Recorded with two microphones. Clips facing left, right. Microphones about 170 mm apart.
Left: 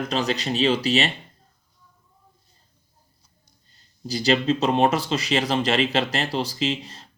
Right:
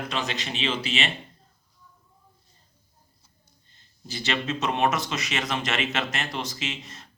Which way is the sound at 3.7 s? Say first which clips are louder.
Left 8 dB; 35° left (ahead or behind).